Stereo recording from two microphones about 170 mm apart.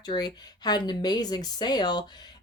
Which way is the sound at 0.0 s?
25° left (ahead or behind).